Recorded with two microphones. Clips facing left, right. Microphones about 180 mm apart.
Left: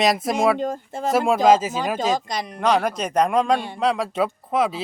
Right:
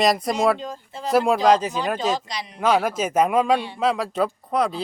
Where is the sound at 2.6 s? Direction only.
5° right (ahead or behind).